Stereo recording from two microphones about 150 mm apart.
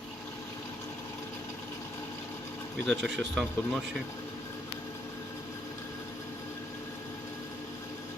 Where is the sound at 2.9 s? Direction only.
Centre (ahead or behind).